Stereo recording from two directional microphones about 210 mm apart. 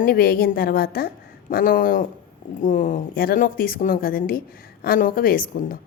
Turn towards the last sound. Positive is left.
turn(degrees=40)  # may be behind; listen again after turning